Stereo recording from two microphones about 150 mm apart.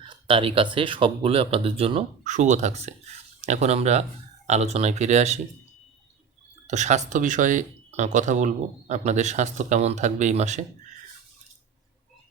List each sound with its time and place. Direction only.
0.0 s speech: 35° right (ahead or behind)
2.2 s speech: 55° right (ahead or behind)
6.7 s speech: 50° right (ahead or behind)